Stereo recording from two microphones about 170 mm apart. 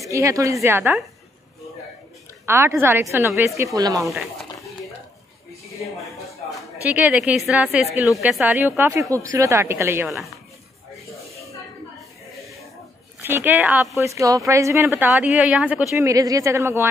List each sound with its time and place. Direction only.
0.1 s a woman's voice: 20° right (ahead or behind)
2.4 s a woman's voice: 15° right (ahead or behind)
4.0 s speech: centre (ahead or behind)
6.5 s a woman's voice: 10° right (ahead or behind)
10.0 s speech: centre (ahead or behind)
13.2 s a woman's voice: 10° right (ahead or behind)
16.0 s a woman's voice: 20° right (ahead or behind)